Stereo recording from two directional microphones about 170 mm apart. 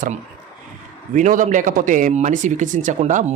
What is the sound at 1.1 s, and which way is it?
Speech, 50° right (ahead or behind).